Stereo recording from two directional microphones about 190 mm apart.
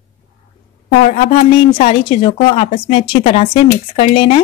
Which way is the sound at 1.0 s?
35° left (ahead or behind).